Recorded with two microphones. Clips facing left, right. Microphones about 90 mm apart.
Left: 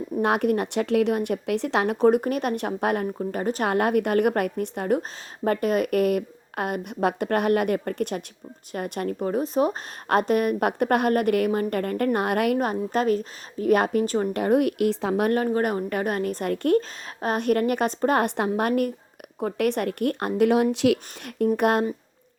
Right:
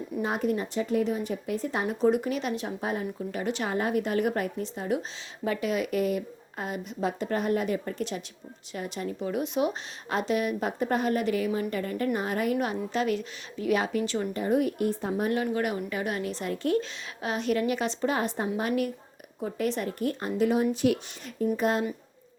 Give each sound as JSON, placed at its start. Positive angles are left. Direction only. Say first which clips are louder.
{"t": 0.2, "sound": "a woman's voice", "louder": "left 6 dB", "side_deg": 65}
{"t": 3.2, "sound": "a woman's voice", "louder": "left 5 dB", "side_deg": 45}
{"t": 3.7, "sound": "a woman's voice", "louder": "left 7 dB", "side_deg": 60}
{"t": 9.3, "sound": "speech", "louder": "left 4 dB", "side_deg": 40}
{"t": 10.1, "sound": "speech", "louder": "left 6 dB", "side_deg": 50}
{"t": 12.5, "sound": "a woman's voice", "louder": "left 4 dB", "side_deg": 45}
{"t": 14.3, "sound": "a woman's voice", "louder": "left 4 dB", "side_deg": 65}
{"t": 15.4, "sound": "a woman's voice", "louder": "left 5 dB", "side_deg": 45}